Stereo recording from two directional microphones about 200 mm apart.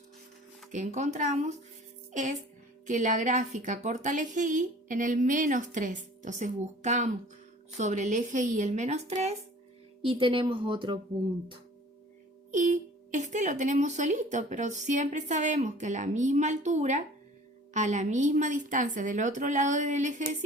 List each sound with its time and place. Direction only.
0.7 s speech: 35° right (ahead or behind)
2.8 s speech: 40° right (ahead or behind)
12.5 s speech: 40° right (ahead or behind)